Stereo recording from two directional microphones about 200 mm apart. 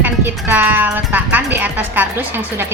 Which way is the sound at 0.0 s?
10° right (ahead or behind).